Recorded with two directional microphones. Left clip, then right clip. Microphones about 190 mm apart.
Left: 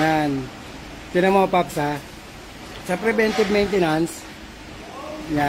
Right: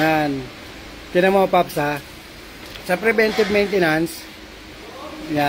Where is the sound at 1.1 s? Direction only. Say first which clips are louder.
Right 2 dB; centre (ahead or behind).